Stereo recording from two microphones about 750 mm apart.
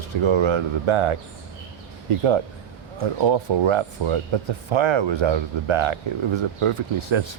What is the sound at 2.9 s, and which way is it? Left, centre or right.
Speech, right.